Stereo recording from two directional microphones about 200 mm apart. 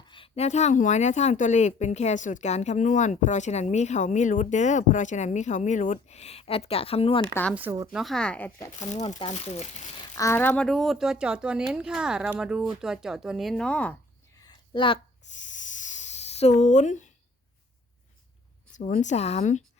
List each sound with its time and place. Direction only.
0.1 s speech: 30° left (ahead or behind)
7.5 s speech: 10° right (ahead or behind)
8.0 s speech: 5° left (ahead or behind)
8.8 s speech: 35° left (ahead or behind)
10.2 s speech: 15° left (ahead or behind)
14.3 s a sound: 20° left (ahead or behind)
15.3 s a sound: 40° left (ahead or behind)
18.7 s speech: 40° left (ahead or behind)